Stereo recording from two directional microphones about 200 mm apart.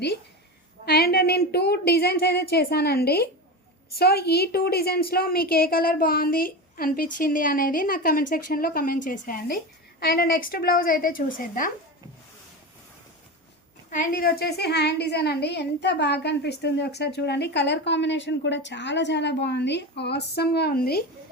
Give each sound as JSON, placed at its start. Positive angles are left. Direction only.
{"t": 0.9, "sound": "a woman's voice", "side_deg": 50}
{"t": 13.9, "sound": "a woman's voice", "side_deg": 45}